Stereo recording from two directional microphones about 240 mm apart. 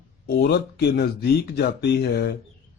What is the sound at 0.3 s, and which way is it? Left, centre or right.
Speech, left.